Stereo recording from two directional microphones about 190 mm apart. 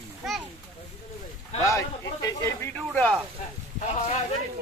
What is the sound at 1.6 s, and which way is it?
A man's voice, 15° left (ahead or behind).